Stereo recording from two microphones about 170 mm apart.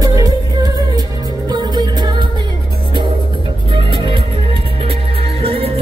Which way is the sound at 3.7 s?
30° right (ahead or behind).